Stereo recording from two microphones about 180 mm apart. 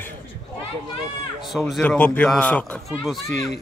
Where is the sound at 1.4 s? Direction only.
Centre (ahead or behind).